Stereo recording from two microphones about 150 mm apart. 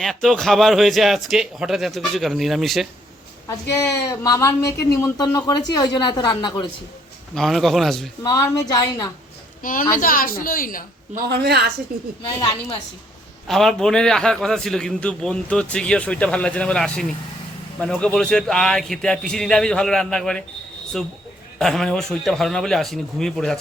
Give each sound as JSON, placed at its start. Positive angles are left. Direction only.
{"t": 0.0, "sound": "a man's voice", "side_deg": 0}
{"t": 3.8, "sound": "speech", "side_deg": 20}
{"t": 7.3, "sound": "a man's voice", "side_deg": 0}
{"t": 8.2, "sound": "speech", "side_deg": 25}
{"t": 9.9, "sound": "a woman's voice", "side_deg": 70}
{"t": 11.1, "sound": "a woman's voice", "side_deg": -80}
{"t": 13.5, "sound": "a man's voice", "side_deg": 0}
{"t": 21.6, "sound": "a man's voice", "side_deg": 5}